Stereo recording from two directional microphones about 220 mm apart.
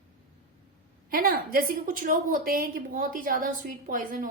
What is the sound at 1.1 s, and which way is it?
A woman's voice, 40° right (ahead or behind).